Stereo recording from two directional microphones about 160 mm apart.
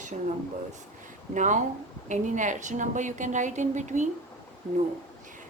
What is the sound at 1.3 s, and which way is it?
Speech, 50° right (ahead or behind).